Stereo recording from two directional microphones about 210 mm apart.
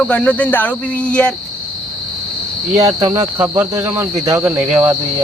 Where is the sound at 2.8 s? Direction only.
15° right (ahead or behind).